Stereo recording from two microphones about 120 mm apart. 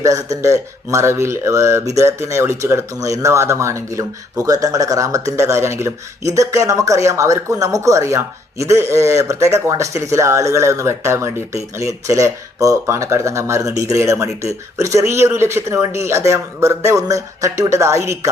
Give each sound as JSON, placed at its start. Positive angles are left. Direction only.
{"t": 0.0, "sound": "speech", "side_deg": -30}